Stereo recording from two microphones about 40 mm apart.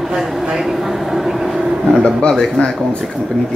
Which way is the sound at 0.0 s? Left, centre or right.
Centre.